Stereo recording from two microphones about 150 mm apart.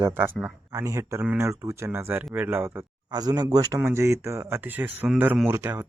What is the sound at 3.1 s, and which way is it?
Speech, 25° right (ahead or behind).